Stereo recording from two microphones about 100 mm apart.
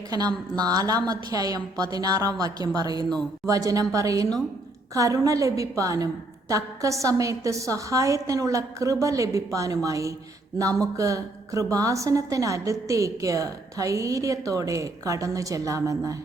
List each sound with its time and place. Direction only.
0.5 s a woman's voice: 40° right (ahead or behind)